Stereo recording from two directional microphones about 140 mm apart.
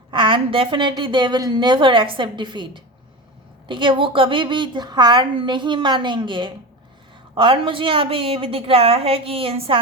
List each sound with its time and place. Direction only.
0.1 s a woman's voice: 35° right (ahead or behind)